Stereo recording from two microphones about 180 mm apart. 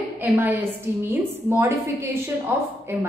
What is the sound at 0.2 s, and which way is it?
Speech, 10° right (ahead or behind).